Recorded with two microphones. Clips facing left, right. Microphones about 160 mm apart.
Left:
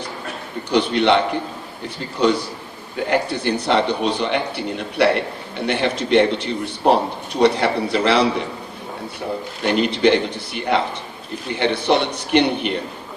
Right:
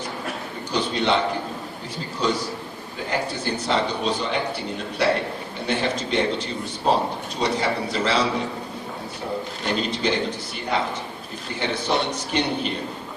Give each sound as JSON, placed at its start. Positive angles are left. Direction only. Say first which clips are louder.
{"t": 0.7, "sound": "a man's voice", "louder": "left 6 dB", "side_deg": 65}
{"t": 2.2, "sound": "a man's voice", "louder": "left 6 dB", "side_deg": 65}
{"t": 9.6, "sound": "a man's voice", "louder": "left 8 dB", "side_deg": 65}